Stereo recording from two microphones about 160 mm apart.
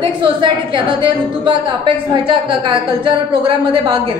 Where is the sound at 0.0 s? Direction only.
30° right (ahead or behind).